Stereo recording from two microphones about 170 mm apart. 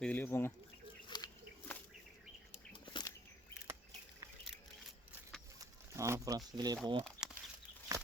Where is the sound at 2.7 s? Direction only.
25° left (ahead or behind).